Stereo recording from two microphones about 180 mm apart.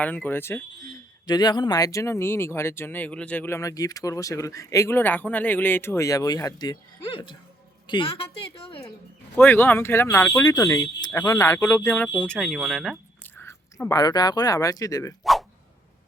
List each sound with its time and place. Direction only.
0.0 s speech: 10° left (ahead or behind)
1.3 s a woman's voice: 25° left (ahead or behind)
9.3 s speech: 10° left (ahead or behind)
13.2 s speech: 10° left (ahead or behind)
15.2 s a sound: centre (ahead or behind)